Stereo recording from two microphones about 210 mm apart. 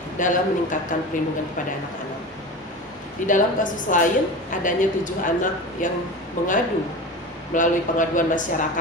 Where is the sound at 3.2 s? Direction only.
40° left (ahead or behind).